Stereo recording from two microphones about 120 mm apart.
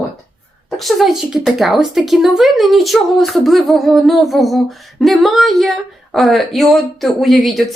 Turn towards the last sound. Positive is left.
turn(degrees=0)  # may be behind; listen again after turning